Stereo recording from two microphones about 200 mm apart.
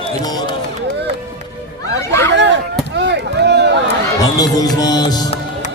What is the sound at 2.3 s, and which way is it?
Chop, 60° right (ahead or behind).